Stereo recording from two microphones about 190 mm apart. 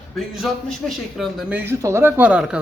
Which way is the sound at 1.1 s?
5° right (ahead or behind).